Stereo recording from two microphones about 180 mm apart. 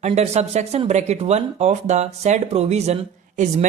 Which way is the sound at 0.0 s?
35° right (ahead or behind).